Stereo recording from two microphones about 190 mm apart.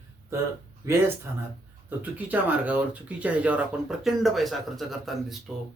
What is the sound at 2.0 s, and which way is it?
Speech, 10° right (ahead or behind).